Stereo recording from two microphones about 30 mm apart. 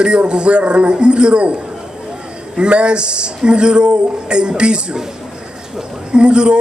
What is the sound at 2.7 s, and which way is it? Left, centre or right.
A man's voice, right.